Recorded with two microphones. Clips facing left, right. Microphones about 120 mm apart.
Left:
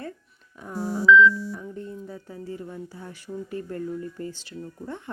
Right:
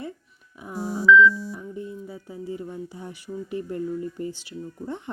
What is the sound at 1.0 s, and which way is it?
Music, 5° right (ahead or behind).